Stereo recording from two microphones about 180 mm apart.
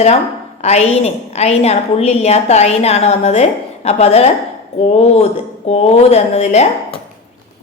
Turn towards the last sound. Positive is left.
turn(degrees=40)  # may be behind; listen again after turning